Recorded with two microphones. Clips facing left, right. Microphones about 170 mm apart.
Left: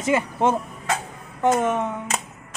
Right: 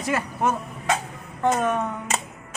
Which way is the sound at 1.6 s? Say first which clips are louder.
Left 1 dB; 25° left (ahead or behind).